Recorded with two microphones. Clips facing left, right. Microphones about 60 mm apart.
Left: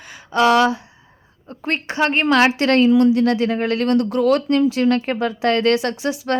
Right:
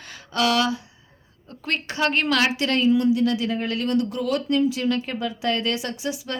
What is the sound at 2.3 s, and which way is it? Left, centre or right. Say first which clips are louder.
A woman's voice: left 7 dB; left.